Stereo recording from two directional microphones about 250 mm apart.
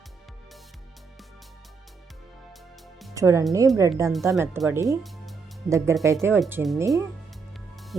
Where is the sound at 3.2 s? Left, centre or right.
Centre.